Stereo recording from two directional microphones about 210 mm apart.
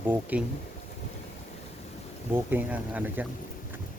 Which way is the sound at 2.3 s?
10° right (ahead or behind).